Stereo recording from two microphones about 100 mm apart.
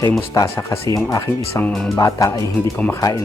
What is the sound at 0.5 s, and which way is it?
Speech, 30° left (ahead or behind).